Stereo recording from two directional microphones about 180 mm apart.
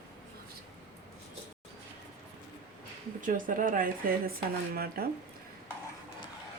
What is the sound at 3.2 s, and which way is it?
Speech, 45° right (ahead or behind).